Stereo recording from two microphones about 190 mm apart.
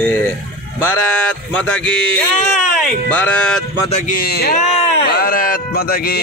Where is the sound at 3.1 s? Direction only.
10° left (ahead or behind).